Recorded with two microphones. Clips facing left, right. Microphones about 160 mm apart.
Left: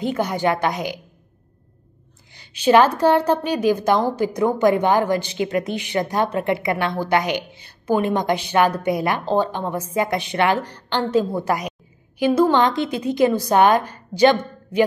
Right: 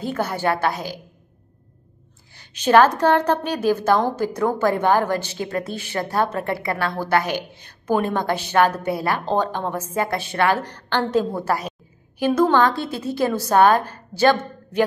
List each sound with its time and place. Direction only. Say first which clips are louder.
0.1 s a woman's voice: even; 15° left (ahead or behind)
2.3 s a woman's voice: even; 10° left (ahead or behind)